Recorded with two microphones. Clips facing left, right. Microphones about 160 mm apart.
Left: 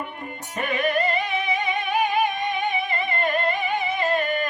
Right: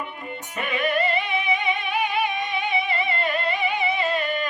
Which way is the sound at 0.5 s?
40° left (ahead or behind).